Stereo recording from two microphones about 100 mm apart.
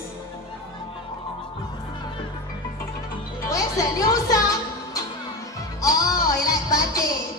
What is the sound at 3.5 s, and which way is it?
Music, 35° left (ahead or behind).